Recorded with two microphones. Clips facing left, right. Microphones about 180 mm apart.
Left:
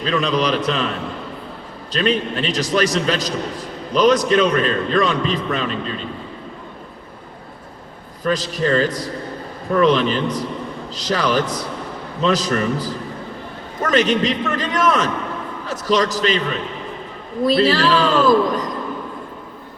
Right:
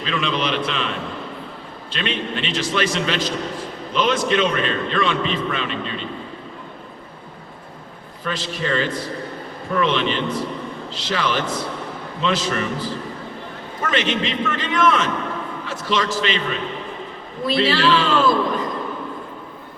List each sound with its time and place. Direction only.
0.0 s a man's voice: 40° left (ahead or behind)
1.9 s a man's voice: 40° left (ahead or behind)
8.2 s a man's voice: 40° left (ahead or behind)
13.8 s a man's voice: 40° left (ahead or behind)
17.4 s a man's voice: 40° left (ahead or behind)